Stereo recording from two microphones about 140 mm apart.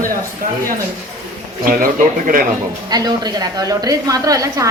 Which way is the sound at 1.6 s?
85° right.